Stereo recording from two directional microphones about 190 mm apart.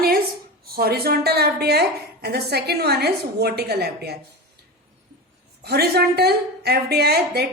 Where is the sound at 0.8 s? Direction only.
55° right (ahead or behind).